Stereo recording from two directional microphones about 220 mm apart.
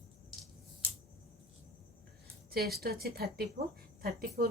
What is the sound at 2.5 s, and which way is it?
Speech, 45° right (ahead or behind).